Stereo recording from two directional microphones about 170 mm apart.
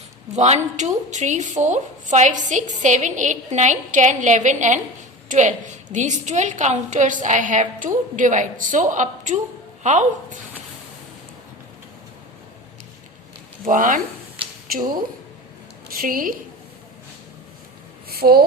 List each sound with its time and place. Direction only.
0.3 s a woman's voice: 40° right (ahead or behind)
13.7 s a woman's voice: 50° right (ahead or behind)
18.1 s speech: 65° right (ahead or behind)